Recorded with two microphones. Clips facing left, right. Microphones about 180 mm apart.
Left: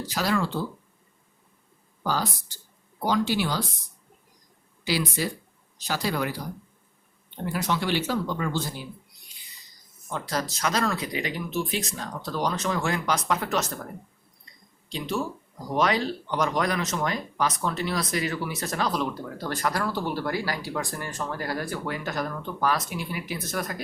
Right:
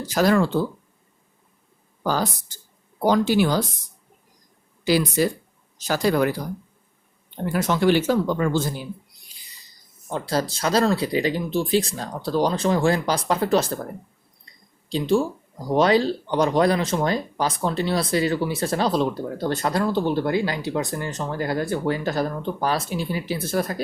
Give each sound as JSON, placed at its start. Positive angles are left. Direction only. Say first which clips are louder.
{"t": 0.0, "sound": "speech", "louder": "right 7 dB", "side_deg": -45}
{"t": 2.0, "sound": "speech", "louder": "right 4 dB", "side_deg": -45}
{"t": 4.9, "sound": "speech", "louder": "right 7 dB", "side_deg": -45}
{"t": 7.4, "sound": "speech", "louder": "right 8 dB", "side_deg": -45}
{"t": 10.1, "sound": "speech", "louder": "right 6 dB", "side_deg": -30}
{"t": 14.8, "sound": "speech", "louder": "right 9 dB", "side_deg": -30}